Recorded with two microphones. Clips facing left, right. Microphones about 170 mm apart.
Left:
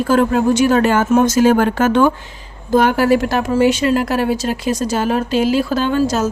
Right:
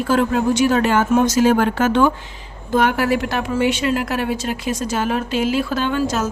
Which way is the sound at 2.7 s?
35° left (ahead or behind).